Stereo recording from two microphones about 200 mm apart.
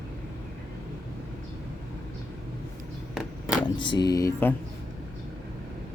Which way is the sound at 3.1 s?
5° right (ahead or behind).